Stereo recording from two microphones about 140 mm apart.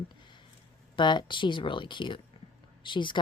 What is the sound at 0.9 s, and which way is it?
Speech, 35° left (ahead or behind).